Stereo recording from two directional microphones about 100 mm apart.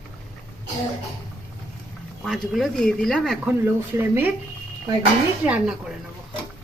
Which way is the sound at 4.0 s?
20° right (ahead or behind).